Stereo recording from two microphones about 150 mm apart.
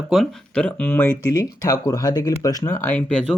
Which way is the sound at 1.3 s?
25° left (ahead or behind).